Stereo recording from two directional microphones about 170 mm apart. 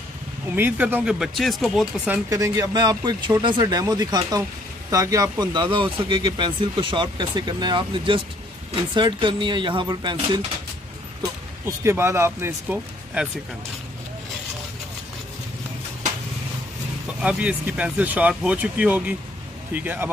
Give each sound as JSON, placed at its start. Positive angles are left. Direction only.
{"t": 0.6, "sound": "speech", "side_deg": -10}
{"t": 2.2, "sound": "speech", "side_deg": -20}
{"t": 11.6, "sound": "speech", "side_deg": -15}
{"t": 17.2, "sound": "speech", "side_deg": -5}